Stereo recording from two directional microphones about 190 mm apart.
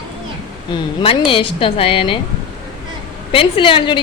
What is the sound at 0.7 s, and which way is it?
A woman's voice, 25° left (ahead or behind).